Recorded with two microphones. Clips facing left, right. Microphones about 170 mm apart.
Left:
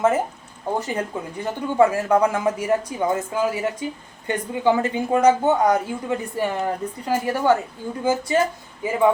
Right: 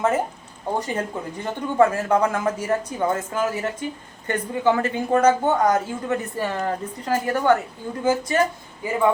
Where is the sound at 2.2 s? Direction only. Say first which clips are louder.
Left 2 dB; 15° left (ahead or behind).